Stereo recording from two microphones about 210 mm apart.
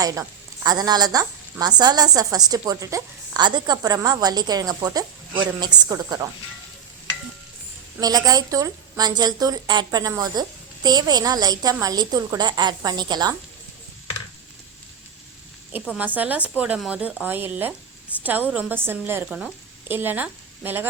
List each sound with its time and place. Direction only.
0.0 s a woman's voice: 15° right (ahead or behind)
8.0 s a woman's voice: 15° right (ahead or behind)
15.7 s a woman's voice: 10° right (ahead or behind)